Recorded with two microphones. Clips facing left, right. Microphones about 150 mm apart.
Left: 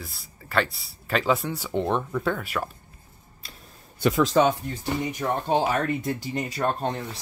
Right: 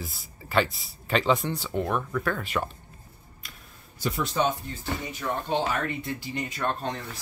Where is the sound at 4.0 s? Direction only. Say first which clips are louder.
Left 7 dB; 90° left.